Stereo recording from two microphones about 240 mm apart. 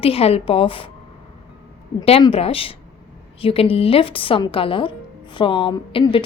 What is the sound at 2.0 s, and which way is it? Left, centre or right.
A woman's voice, left.